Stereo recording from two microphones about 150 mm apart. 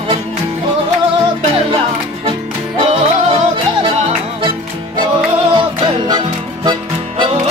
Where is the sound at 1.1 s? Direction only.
35° right (ahead or behind).